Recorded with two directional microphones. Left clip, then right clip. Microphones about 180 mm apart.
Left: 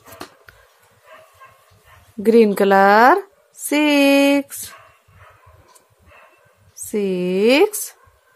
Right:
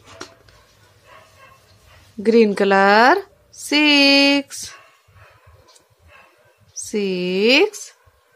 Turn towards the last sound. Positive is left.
turn(degrees=0)  # may be behind; listen again after turning